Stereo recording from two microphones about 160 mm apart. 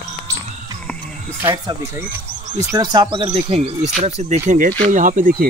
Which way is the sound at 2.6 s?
25° right (ahead or behind).